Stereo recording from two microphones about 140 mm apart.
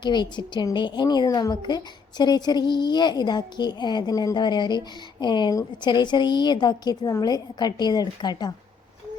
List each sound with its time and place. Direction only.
0.0 s a woman's voice: 30° left (ahead or behind)